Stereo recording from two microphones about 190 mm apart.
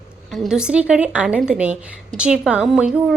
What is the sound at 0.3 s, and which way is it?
A woman's voice, centre (ahead or behind).